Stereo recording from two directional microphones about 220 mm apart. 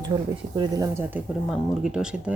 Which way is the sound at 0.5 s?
20° right (ahead or behind).